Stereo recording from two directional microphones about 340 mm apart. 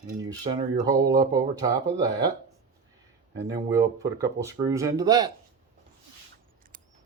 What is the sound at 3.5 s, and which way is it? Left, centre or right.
Speech, centre.